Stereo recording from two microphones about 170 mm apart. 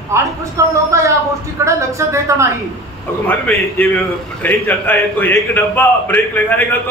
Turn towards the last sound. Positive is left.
turn(degrees=10)  # may be behind; listen again after turning